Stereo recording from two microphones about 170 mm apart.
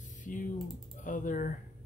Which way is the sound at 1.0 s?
50° left (ahead or behind).